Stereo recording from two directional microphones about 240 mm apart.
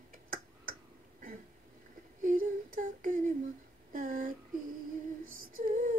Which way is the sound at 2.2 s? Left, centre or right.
Right.